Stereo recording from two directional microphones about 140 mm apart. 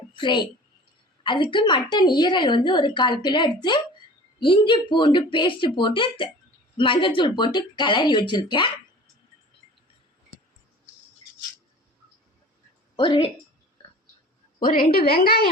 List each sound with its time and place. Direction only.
0.1 s a sound: 35° left (ahead or behind)
1.2 s a woman's voice: 35° left (ahead or behind)
13.0 s a woman's voice: 35° left (ahead or behind)
14.6 s a woman's voice: 85° left